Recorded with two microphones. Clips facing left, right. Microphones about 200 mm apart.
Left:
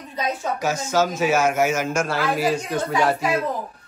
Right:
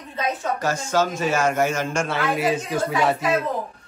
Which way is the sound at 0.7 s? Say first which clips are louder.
Left 1 dB; 10° left (ahead or behind).